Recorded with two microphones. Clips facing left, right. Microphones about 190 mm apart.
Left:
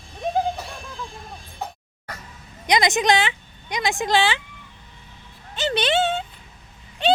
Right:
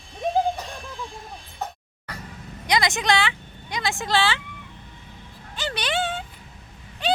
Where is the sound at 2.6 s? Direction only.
20° left (ahead or behind).